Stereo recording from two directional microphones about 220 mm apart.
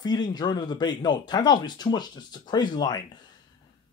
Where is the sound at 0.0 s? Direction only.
20° left (ahead or behind).